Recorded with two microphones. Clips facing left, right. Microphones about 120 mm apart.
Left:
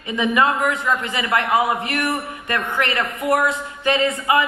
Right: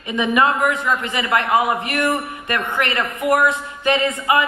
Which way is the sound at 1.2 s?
20° right (ahead or behind).